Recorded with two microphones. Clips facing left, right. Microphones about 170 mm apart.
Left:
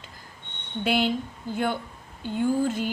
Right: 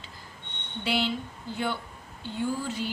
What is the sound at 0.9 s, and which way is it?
Speech, 50° left (ahead or behind).